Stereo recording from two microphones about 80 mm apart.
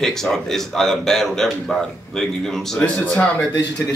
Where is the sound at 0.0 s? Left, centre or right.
Centre.